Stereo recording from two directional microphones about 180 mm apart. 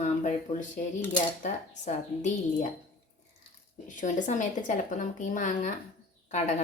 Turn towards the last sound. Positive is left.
turn(degrees=40)  # may be behind; listen again after turning